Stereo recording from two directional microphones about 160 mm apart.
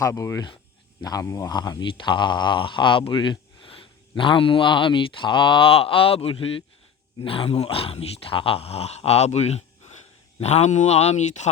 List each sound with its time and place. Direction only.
0.0 s speech: 20° left (ahead or behind); by 11.4 s 45° left (ahead or behind)